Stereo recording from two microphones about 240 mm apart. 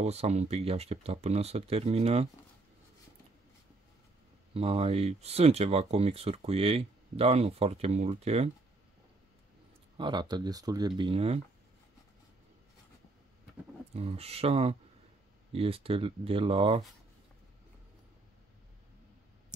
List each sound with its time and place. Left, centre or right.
0.0 s speech: right
4.6 s speech: right
9.9 s speech: centre
13.9 s speech: right